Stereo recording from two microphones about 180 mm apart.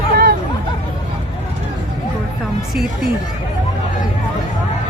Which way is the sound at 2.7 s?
Centre (ahead or behind).